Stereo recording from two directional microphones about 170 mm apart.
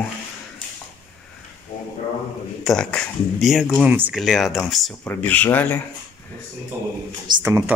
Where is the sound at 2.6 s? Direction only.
5° left (ahead or behind).